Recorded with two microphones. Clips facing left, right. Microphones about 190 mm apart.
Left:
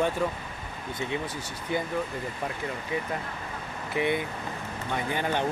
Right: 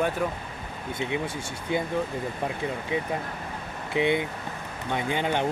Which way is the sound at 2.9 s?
20° right (ahead or behind).